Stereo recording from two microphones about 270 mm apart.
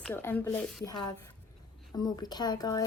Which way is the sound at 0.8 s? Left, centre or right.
Centre.